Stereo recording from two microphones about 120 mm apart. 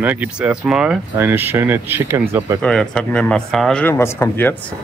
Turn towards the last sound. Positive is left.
turn(degrees=20)  # may be behind; listen again after turning